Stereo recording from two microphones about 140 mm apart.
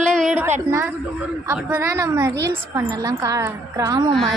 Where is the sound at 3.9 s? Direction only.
30° right (ahead or behind).